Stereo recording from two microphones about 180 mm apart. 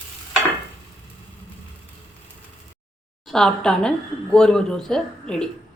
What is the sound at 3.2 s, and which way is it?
A woman's voice, 5° left (ahead or behind).